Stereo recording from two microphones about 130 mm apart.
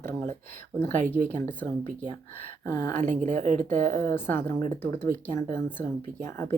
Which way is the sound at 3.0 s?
75° right (ahead or behind).